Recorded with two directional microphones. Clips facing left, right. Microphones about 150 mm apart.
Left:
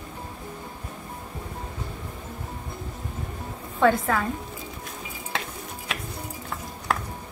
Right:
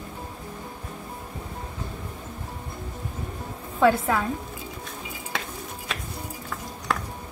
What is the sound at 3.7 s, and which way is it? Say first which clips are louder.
Speech: right 1 dB; 5° right (ahead or behind).